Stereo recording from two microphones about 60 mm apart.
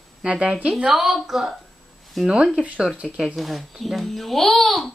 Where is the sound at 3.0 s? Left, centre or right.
Centre.